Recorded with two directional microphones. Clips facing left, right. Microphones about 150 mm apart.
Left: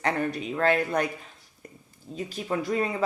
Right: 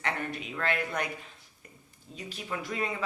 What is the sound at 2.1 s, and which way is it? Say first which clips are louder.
Speech: left 8 dB; 40° left (ahead or behind).